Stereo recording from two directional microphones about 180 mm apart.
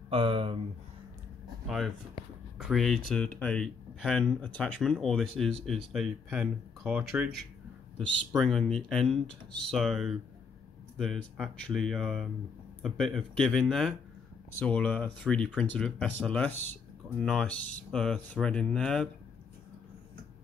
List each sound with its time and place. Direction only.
0.1 s speech: 30° right (ahead or behind)
2.6 s speech: centre (ahead or behind)
8.4 s speech: centre (ahead or behind)